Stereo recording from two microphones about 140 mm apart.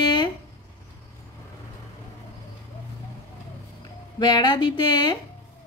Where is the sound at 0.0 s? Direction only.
30° left (ahead or behind).